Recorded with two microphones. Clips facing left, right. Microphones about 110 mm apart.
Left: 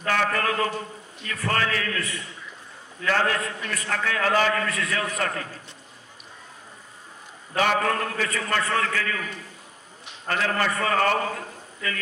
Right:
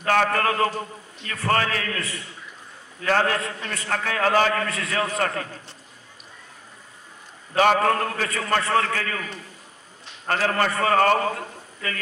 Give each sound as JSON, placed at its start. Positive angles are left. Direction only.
{"t": 0.0, "sound": "a man's voice", "side_deg": -45}
{"t": 7.5, "sound": "a man's voice", "side_deg": -45}
{"t": 10.7, "sound": "speech", "side_deg": -30}
{"t": 10.9, "sound": "a man's voice", "side_deg": -40}